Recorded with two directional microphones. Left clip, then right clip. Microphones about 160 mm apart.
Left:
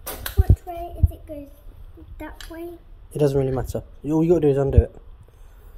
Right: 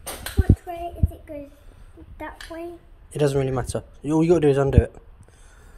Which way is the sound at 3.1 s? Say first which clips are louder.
Left 1 dB; 35° left (ahead or behind).